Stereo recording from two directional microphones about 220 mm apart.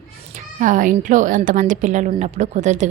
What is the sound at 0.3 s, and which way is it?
A woman's voice, 35° right (ahead or behind).